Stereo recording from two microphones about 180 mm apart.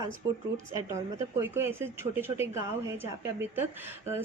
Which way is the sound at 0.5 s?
15° right (ahead or behind).